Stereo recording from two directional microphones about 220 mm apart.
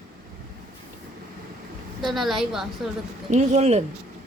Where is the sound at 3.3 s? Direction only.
30° right (ahead or behind).